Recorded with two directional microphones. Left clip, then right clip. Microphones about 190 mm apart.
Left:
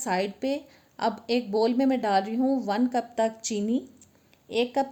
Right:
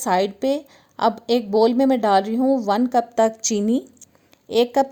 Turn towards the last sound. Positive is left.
turn(degrees=-50)  # may be behind; listen again after turning